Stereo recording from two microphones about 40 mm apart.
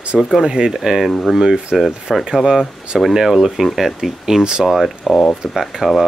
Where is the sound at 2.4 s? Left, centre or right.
Centre.